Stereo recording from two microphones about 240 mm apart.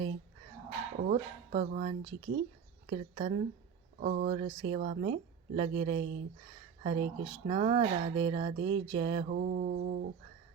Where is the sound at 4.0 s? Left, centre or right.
Right.